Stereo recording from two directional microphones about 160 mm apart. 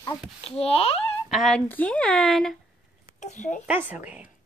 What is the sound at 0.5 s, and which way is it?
Speech, 35° left (ahead or behind).